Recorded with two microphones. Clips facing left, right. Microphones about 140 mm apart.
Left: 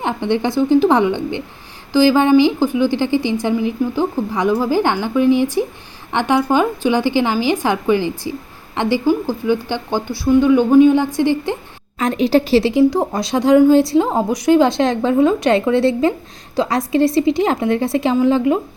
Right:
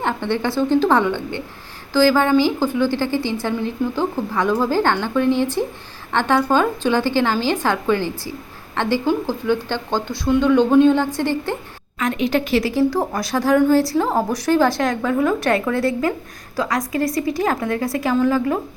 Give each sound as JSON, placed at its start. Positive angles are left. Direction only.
{"t": 0.0, "sound": "a woman's voice", "side_deg": 15}
{"t": 11.9, "sound": "a woman's voice", "side_deg": 35}
{"t": 12.7, "sound": "a woman's voice", "side_deg": 20}